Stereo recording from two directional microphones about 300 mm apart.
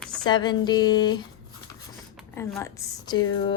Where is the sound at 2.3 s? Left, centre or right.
Centre.